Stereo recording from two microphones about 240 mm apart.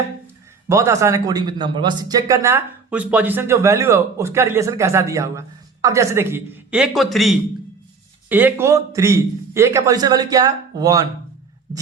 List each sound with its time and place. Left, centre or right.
0.7 s speech: centre